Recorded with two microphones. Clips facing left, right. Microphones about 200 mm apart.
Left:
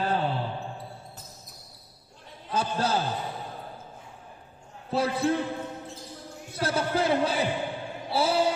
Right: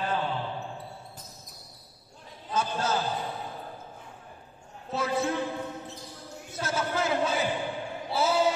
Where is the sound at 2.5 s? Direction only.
30° left (ahead or behind).